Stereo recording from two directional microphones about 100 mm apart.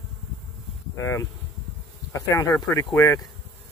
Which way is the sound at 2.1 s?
30° left (ahead or behind).